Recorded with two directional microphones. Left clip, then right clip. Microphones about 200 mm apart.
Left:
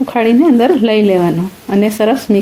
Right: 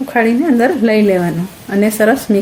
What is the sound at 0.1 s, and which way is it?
Speech, 30° left (ahead or behind).